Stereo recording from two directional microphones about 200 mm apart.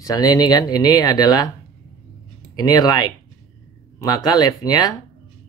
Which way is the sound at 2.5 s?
20° left (ahead or behind).